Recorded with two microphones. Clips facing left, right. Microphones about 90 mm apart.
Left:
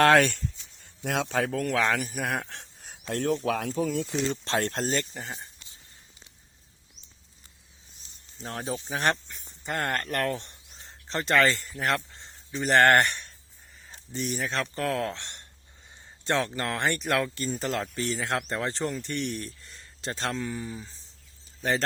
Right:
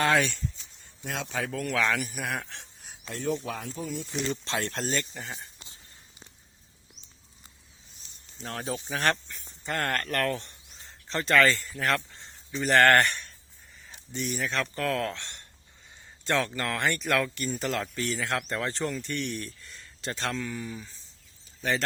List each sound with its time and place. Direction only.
0.0 s speech: 55° left (ahead or behind)
3.4 s speech: 75° left (ahead or behind)
4.1 s speech: 30° left (ahead or behind)
4.4 s speech: 40° left (ahead or behind)
8.4 s speech: 25° left (ahead or behind)
9.4 s a sound: 10° left (ahead or behind)
9.9 s speech: 20° left (ahead or behind)